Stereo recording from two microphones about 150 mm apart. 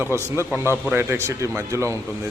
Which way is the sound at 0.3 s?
15° right (ahead or behind).